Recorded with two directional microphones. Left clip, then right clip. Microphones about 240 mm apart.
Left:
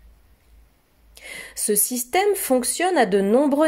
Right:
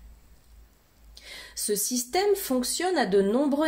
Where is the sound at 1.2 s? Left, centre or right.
Left.